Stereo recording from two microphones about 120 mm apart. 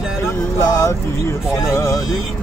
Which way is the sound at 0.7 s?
25° left (ahead or behind).